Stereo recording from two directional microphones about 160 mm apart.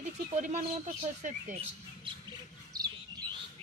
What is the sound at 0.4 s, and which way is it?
Speech, 50° right (ahead or behind).